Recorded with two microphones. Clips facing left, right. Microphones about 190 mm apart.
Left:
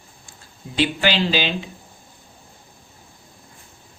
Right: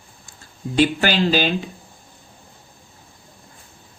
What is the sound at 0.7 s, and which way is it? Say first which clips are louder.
Speech: right 3 dB; 45° right (ahead or behind).